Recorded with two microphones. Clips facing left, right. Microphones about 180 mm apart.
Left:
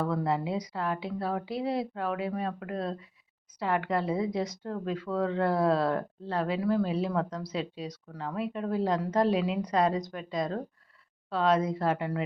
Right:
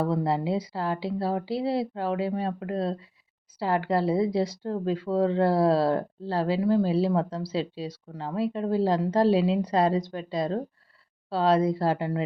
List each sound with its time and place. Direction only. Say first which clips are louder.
0.0 s a woman's voice: right 3 dB; 30° right (ahead or behind)